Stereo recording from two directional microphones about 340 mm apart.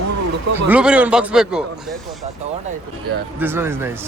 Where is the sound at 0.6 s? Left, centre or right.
Centre.